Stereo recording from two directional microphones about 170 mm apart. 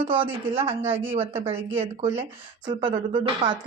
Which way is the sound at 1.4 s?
35° right (ahead or behind).